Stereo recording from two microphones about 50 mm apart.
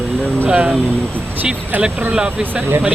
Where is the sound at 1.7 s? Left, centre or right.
Right.